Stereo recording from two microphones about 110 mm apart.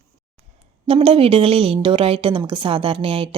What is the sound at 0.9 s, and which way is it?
A woman's voice, 55° right (ahead or behind).